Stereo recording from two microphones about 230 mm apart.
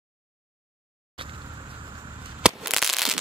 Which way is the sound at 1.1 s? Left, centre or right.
Right.